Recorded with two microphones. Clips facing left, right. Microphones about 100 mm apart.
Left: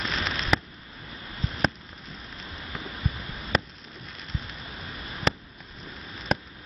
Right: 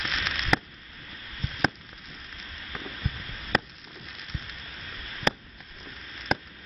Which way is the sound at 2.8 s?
20° left (ahead or behind).